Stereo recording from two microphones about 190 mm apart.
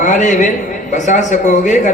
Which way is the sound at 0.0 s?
40° left (ahead or behind).